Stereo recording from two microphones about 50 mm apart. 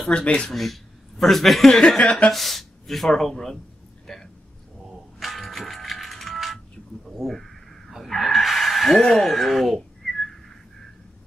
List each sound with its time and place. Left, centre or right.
0.0 s speech: left
0.5 s speech: centre
1.7 s speech: centre
2.3 s speech: centre
4.7 s a sound: centre
5.2 s music: centre
7.1 s speech: centre
7.9 s chicken: centre
9.0 s speech: centre